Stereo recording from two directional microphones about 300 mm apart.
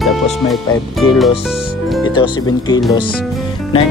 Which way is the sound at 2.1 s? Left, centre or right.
Centre.